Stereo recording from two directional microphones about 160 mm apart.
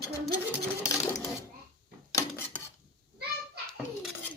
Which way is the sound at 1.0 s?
20° left (ahead or behind).